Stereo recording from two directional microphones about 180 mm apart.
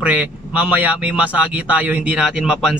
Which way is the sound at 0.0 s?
10° right (ahead or behind).